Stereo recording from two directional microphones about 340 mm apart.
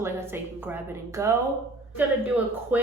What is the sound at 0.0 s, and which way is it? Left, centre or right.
A woman's voice, centre.